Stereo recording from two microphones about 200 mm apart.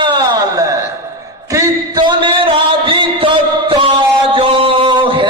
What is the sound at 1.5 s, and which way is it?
Music, 20° right (ahead or behind).